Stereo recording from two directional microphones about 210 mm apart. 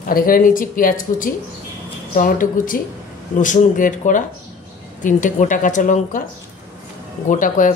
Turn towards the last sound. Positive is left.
turn(degrees=40)  # may be behind; listen again after turning